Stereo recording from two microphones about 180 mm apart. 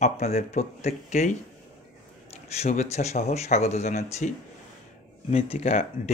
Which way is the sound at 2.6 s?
40° left (ahead or behind).